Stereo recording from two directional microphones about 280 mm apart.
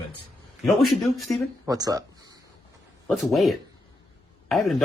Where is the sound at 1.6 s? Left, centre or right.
Centre.